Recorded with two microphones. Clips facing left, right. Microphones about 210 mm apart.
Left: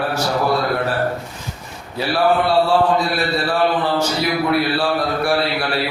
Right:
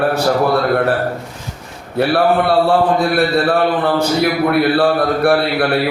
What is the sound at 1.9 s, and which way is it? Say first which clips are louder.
A man's voice: right 4 dB; 60° right (ahead or behind).